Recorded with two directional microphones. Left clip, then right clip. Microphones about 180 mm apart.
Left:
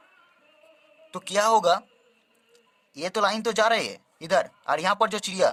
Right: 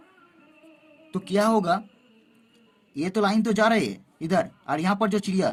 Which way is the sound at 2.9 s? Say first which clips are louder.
Even; 35° left (ahead or behind).